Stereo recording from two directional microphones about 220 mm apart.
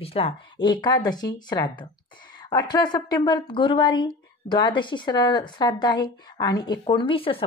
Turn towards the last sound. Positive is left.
turn(degrees=25)  # may be behind; listen again after turning